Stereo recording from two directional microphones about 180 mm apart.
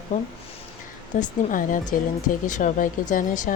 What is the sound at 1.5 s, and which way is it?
Speech, 45° left (ahead or behind).